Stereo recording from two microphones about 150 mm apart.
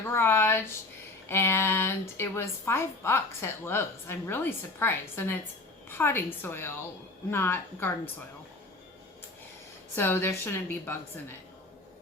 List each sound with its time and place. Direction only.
0.1 s a woman's voice: 15° left (ahead or behind)
9.9 s a woman's voice: 15° left (ahead or behind)